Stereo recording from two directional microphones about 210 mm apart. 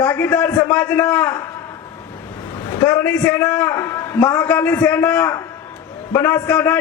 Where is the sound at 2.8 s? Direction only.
10° left (ahead or behind).